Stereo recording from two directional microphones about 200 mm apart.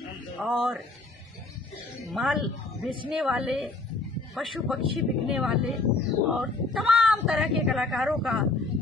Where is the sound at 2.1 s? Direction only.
Centre (ahead or behind).